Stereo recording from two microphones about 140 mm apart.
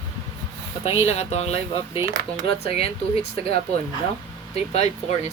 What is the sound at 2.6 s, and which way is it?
Speech, 45° left (ahead or behind).